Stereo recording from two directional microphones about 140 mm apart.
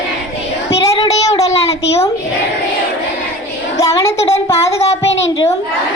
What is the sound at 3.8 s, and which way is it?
Speech, 20° left (ahead or behind).